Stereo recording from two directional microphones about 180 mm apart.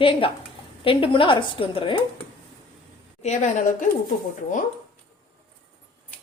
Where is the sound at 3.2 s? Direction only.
40° left (ahead or behind).